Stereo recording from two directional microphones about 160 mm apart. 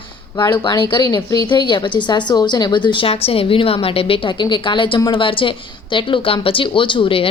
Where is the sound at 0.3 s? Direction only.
25° left (ahead or behind).